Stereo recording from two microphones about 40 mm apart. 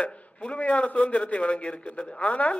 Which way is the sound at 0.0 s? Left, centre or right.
Left.